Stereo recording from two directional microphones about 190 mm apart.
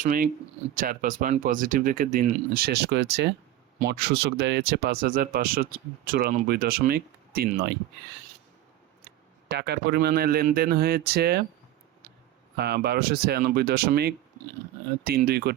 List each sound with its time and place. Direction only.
0.0 s speech: 45° right (ahead or behind)
9.5 s speech: 60° right (ahead or behind)
12.5 s speech: 55° right (ahead or behind)